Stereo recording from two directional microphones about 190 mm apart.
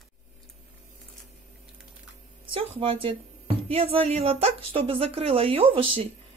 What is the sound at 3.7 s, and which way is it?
A woman's voice, 30° right (ahead or behind).